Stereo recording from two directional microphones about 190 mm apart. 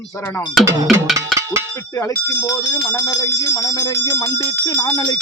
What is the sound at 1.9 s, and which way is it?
Speech, 15° left (ahead or behind).